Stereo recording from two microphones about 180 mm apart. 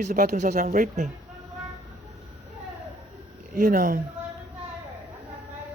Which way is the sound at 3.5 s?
45° right (ahead or behind).